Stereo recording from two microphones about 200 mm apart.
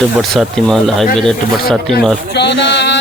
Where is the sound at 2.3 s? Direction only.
60° left (ahead or behind).